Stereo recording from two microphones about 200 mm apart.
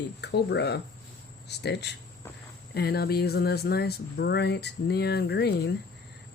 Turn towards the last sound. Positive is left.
turn(degrees=55)  # may be behind; listen again after turning